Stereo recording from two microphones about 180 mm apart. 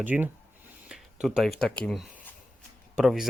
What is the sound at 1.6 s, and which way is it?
Speech, 5° left (ahead or behind).